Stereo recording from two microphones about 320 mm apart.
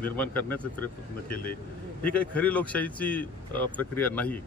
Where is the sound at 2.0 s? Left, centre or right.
Centre.